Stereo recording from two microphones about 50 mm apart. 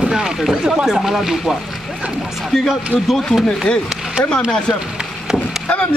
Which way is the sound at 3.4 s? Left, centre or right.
Centre.